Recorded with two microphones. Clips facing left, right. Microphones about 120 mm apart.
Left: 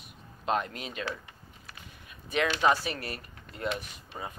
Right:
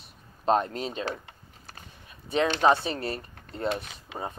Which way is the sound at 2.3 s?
30° right (ahead or behind).